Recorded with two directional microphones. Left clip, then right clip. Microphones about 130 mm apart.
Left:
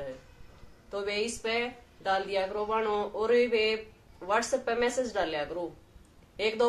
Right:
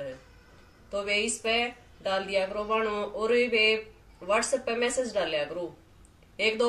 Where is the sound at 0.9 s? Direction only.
25° left (ahead or behind).